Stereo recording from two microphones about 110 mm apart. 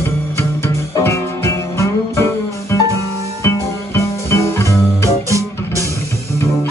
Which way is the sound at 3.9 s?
25° left (ahead or behind).